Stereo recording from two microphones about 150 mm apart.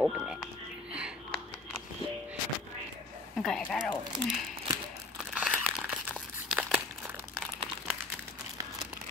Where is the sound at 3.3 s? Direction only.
5° left (ahead or behind).